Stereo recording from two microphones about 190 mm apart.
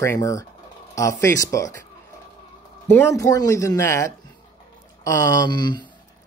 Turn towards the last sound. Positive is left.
turn(degrees=25)  # may be behind; listen again after turning